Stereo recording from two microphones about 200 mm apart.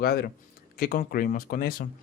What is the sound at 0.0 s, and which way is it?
Speech, 50° left (ahead or behind).